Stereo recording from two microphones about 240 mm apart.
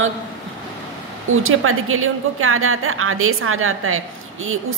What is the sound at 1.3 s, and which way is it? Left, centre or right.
A woman's voice, right.